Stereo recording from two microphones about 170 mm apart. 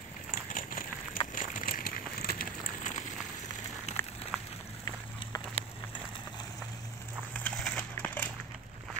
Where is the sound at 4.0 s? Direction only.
15° left (ahead or behind).